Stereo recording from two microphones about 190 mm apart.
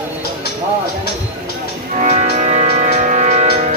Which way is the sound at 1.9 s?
40° right (ahead or behind).